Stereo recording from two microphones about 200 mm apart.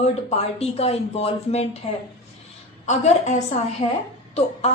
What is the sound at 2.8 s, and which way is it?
A woman's voice, 35° left (ahead or behind).